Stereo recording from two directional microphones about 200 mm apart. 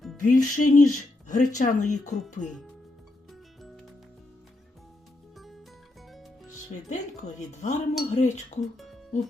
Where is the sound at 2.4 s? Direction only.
40° left (ahead or behind).